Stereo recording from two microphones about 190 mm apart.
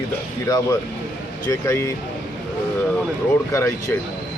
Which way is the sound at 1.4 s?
15° left (ahead or behind).